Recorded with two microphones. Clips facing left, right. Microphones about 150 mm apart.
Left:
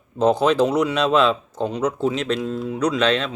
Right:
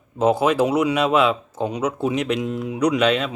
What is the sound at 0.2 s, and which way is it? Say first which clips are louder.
Speech: left 1 dB; 5° right (ahead or behind).